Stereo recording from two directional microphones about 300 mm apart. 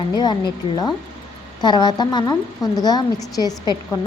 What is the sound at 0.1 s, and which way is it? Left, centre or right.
A woman's voice, centre.